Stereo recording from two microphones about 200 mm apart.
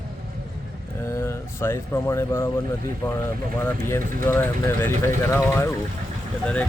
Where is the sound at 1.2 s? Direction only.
10° left (ahead or behind).